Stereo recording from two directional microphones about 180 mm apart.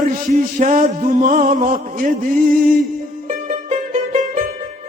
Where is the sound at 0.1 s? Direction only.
45° right (ahead or behind).